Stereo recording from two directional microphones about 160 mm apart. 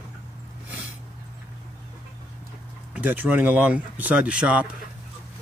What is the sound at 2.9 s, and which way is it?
Speech, 10° right (ahead or behind).